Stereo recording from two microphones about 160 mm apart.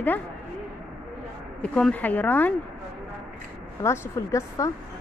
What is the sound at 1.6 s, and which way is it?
Speech, 5° left (ahead or behind).